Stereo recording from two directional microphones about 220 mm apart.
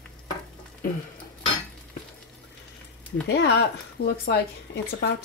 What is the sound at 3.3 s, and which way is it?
Speech, 50° left (ahead or behind).